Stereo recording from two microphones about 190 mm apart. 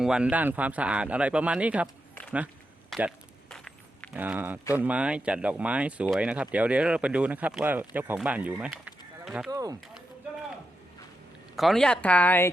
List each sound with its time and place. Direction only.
0.0 s speech: 5° right (ahead or behind)
2.9 s zipper: centre (ahead or behind)
4.1 s speech: 10° right (ahead or behind)
9.5 s speech: 20° right (ahead or behind)
11.5 s speech: centre (ahead or behind)